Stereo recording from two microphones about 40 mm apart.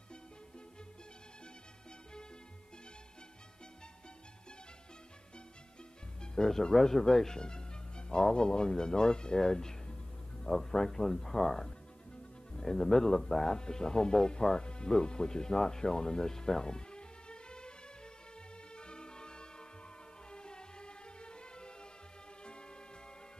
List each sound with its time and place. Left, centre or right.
6.2 s speech: centre
18.8 s music: left